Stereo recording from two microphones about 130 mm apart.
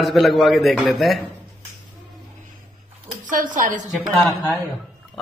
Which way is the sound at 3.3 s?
85° right.